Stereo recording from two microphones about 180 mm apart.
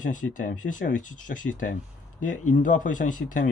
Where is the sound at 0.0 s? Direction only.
45° left (ahead or behind).